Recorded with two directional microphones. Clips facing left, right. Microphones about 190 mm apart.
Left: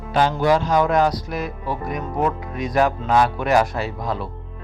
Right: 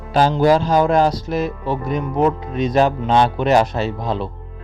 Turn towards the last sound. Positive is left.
turn(degrees=-25)  # may be behind; listen again after turning